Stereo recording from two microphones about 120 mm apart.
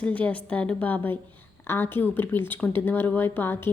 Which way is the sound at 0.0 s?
10° left (ahead or behind).